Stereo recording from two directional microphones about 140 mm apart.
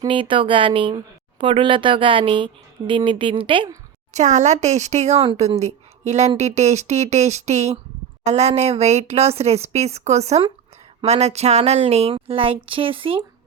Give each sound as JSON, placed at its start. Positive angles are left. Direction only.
{"t": 0.1, "sound": "speech", "side_deg": -40}
{"t": 4.1, "sound": "speech", "side_deg": -55}
{"t": 5.2, "sound": "speech", "side_deg": -40}